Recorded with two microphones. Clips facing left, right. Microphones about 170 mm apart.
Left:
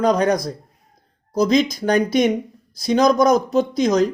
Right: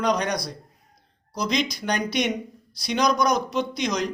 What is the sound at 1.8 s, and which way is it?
Speech, 45° left (ahead or behind).